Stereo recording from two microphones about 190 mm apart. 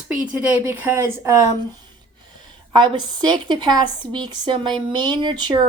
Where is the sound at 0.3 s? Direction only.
10° right (ahead or behind).